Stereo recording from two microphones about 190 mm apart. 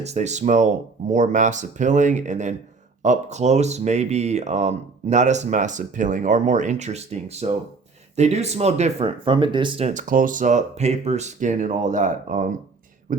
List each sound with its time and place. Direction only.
0.0 s speech: 35° right (ahead or behind)